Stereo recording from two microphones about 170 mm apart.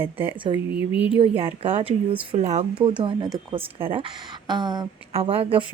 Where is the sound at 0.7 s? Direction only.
10° right (ahead or behind).